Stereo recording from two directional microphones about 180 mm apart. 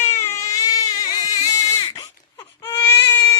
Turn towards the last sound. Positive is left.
turn(degrees=15)  # may be behind; listen again after turning